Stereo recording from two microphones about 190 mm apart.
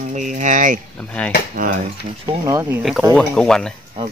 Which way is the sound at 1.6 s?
45° right (ahead or behind).